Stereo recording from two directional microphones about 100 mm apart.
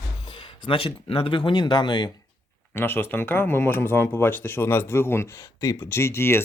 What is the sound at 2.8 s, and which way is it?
Speech, 20° left (ahead or behind).